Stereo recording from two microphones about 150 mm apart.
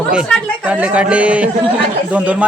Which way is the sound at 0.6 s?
10° right (ahead or behind).